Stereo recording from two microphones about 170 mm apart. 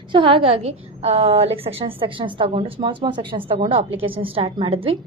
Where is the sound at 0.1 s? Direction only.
30° right (ahead or behind).